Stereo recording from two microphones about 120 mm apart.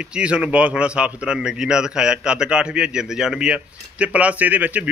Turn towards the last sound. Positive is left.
turn(degrees=-15)  # may be behind; listen again after turning